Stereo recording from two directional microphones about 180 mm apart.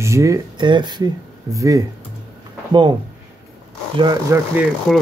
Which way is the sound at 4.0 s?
20° right (ahead or behind).